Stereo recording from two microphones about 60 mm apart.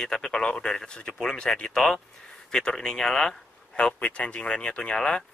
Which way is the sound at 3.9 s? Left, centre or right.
Left.